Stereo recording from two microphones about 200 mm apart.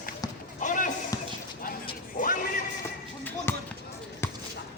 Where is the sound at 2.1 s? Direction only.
45° left (ahead or behind).